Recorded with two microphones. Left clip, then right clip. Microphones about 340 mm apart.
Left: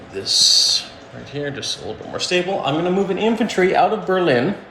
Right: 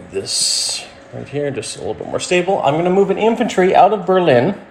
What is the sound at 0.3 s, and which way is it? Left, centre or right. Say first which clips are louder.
Speech: left 6 dB; centre.